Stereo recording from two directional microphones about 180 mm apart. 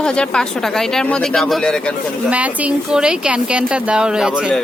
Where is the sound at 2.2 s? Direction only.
10° right (ahead or behind).